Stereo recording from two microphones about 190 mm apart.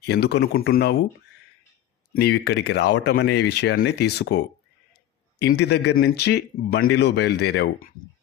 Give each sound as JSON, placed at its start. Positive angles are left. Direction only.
{"t": 0.0, "sound": "speech", "side_deg": 60}
{"t": 2.1, "sound": "speech", "side_deg": 60}
{"t": 5.5, "sound": "speech", "side_deg": 60}